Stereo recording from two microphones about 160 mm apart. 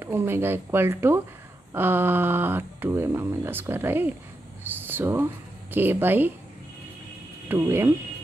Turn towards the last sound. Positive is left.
turn(degrees=-15)  # may be behind; listen again after turning